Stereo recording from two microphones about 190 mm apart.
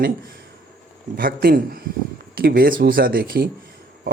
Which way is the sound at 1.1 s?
50° right (ahead or behind).